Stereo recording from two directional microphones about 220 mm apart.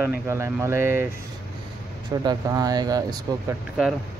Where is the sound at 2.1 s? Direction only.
15° right (ahead or behind).